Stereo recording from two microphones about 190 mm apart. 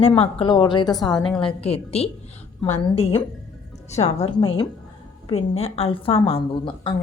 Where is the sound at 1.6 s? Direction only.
30° left (ahead or behind).